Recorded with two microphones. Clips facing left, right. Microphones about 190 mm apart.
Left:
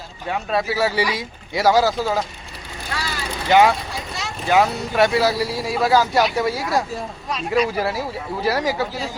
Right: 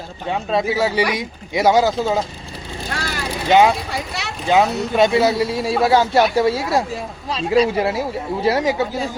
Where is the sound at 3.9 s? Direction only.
70° right (ahead or behind).